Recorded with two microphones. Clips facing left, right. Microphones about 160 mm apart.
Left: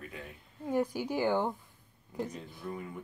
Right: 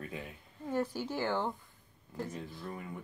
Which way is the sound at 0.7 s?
15° left (ahead or behind).